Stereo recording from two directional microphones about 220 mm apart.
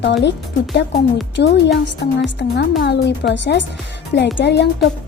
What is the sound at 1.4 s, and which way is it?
A woman's voice, 50° left (ahead or behind).